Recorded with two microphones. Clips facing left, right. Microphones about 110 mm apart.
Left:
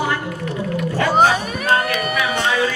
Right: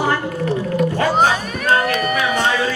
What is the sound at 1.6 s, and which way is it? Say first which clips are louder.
Crowd: right 2 dB; 35° right (ahead or behind).